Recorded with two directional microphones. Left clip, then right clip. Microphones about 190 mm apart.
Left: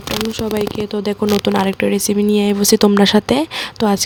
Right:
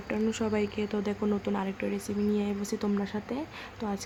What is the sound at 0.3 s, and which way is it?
A woman's voice, 25° left (ahead or behind).